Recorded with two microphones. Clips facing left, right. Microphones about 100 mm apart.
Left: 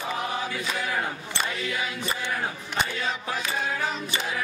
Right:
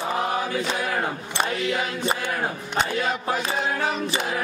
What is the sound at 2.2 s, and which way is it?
Speech, 50° right (ahead or behind).